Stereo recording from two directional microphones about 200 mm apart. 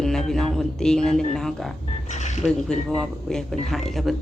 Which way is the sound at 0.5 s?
5° left (ahead or behind).